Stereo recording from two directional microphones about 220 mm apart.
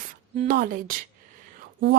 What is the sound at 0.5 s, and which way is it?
Speech, 40° right (ahead or behind).